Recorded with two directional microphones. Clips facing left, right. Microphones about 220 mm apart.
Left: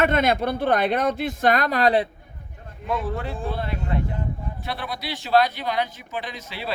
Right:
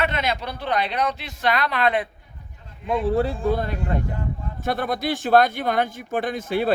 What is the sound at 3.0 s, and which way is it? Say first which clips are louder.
Speech: right 8 dB; 35° right (ahead or behind).